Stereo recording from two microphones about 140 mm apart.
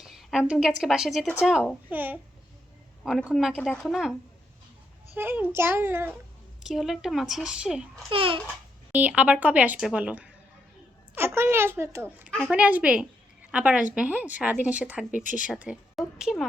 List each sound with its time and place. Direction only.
0.0 s a woman's voice: centre (ahead or behind)
3.0 s a woman's voice: centre (ahead or behind)
5.1 s a woman's voice: 15° right (ahead or behind)
6.6 s a woman's voice: 5° right (ahead or behind)
8.1 s a child's voice: 40° right (ahead or behind)
8.9 s a woman's voice: 10° right (ahead or behind)